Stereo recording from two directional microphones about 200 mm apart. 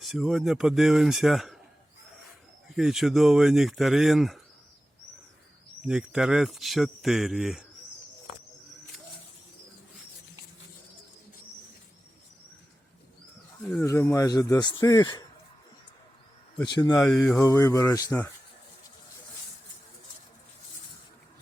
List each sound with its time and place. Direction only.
0.0 s speech: centre (ahead or behind)
2.7 s speech: centre (ahead or behind)
5.8 s speech: 5° right (ahead or behind)
13.6 s speech: 5° left (ahead or behind)
16.6 s speech: 20° left (ahead or behind)
16.9 s speech: 5° left (ahead or behind)
17.4 s speech: 15° left (ahead or behind)